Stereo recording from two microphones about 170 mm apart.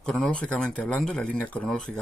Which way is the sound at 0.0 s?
5° left (ahead or behind).